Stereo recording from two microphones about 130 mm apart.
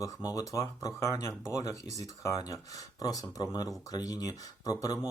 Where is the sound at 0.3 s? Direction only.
25° left (ahead or behind).